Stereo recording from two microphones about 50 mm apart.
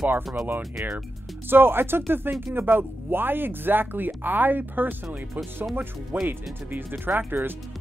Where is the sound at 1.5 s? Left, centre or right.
Right.